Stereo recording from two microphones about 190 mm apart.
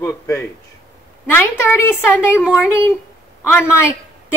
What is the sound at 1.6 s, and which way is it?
Speech, 10° left (ahead or behind).